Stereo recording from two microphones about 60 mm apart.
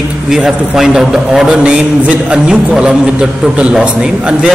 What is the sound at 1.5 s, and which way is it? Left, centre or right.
A man's voice, centre.